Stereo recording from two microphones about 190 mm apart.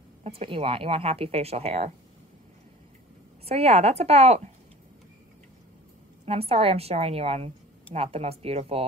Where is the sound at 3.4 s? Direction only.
30° right (ahead or behind).